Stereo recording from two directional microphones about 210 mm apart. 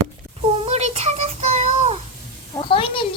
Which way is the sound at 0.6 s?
30° right (ahead or behind).